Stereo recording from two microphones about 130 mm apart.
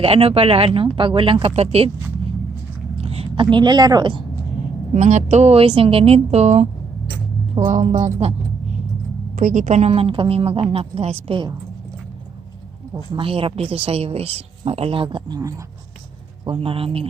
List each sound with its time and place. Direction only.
0.0 s a woman's voice: 50° right (ahead or behind)
3.0 s a sound: 50° right (ahead or behind)
3.5 s speech: 35° right (ahead or behind)
4.9 s a woman's voice: 60° right (ahead or behind)
7.7 s speech: 60° right (ahead or behind)
9.3 s a woman's voice: 85° right; by 11.5 s 40° right (ahead or behind)
13.1 s a woman's voice: 45° right (ahead or behind)
16.5 s a woman's voice: 45° right (ahead or behind)